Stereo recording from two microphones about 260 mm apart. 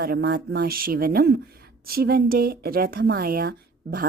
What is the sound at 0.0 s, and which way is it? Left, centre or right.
A woman's voice, right.